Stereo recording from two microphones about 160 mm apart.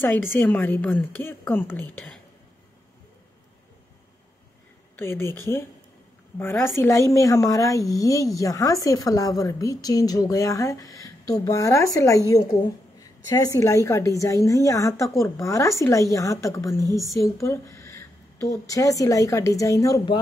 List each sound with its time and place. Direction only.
0.0 s a woman's voice: 15° left (ahead or behind)
4.9 s a woman's voice: 15° left (ahead or behind)
16.8 s a woman's voice: 20° right (ahead or behind)
17.1 s a sound: 20° left (ahead or behind)
18.7 s a woman's voice: 20° left (ahead or behind)